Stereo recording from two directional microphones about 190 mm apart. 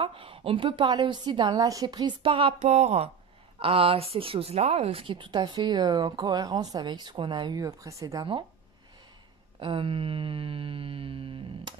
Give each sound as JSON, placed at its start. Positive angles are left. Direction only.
{"t": 0.0, "sound": "a woman's voice", "side_deg": -30}
{"t": 9.6, "sound": "a woman's voice", "side_deg": -25}